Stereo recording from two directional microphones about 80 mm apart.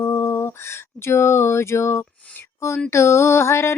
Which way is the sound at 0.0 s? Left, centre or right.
Left.